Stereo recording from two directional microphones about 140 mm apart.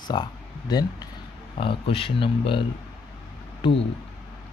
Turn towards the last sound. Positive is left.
turn(degrees=35)  # may be behind; listen again after turning